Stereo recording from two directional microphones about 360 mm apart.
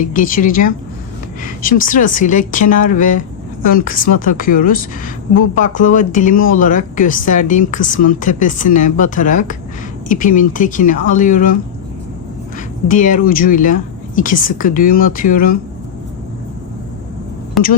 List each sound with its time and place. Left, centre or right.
0.1 s a woman's voice: left
12.9 s a woman's voice: left